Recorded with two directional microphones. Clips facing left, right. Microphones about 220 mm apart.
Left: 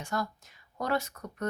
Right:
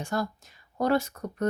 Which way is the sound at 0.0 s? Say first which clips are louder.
Right 4 dB; 30° right (ahead or behind).